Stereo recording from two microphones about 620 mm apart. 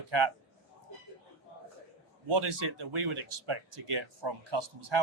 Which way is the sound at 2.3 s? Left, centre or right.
Right.